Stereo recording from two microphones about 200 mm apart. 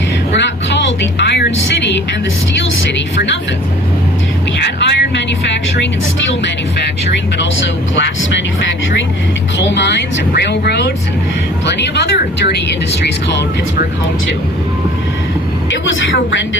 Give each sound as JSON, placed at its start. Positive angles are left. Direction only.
{"t": 0.3, "sound": "music", "side_deg": 60}
{"t": 4.6, "sound": "vehicle", "side_deg": 60}
{"t": 9.6, "sound": "a sound", "side_deg": 60}
{"t": 15.7, "sound": "vehicle", "side_deg": 65}